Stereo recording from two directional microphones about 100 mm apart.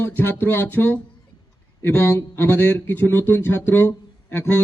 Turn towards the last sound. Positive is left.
turn(degrees=20)  # may be behind; listen again after turning